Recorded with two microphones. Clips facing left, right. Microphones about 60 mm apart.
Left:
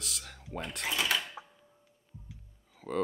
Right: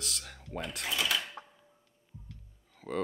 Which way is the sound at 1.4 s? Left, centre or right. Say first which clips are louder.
Even; centre.